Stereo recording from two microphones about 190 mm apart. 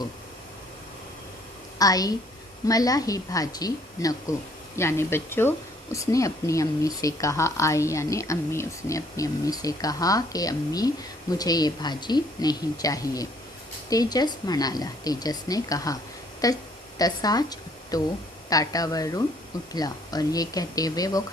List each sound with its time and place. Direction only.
1.8 s a woman's voice: 20° left (ahead or behind)